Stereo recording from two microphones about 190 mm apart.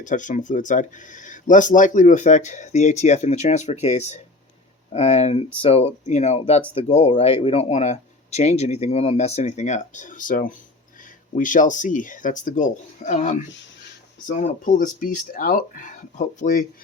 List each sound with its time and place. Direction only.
0.0 s speech: 40° left (ahead or behind)